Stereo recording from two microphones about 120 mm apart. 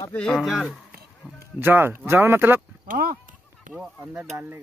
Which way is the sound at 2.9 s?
90° right.